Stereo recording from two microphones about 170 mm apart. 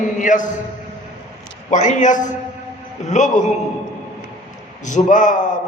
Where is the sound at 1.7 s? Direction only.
45° left (ahead or behind).